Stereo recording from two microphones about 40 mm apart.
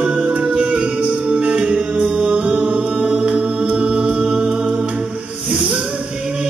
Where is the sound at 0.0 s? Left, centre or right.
Right.